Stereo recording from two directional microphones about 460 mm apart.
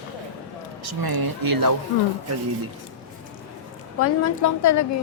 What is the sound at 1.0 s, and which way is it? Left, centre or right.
Speech, right.